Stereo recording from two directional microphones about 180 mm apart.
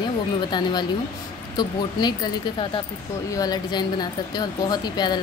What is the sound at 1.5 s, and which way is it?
Speech, 25° left (ahead or behind).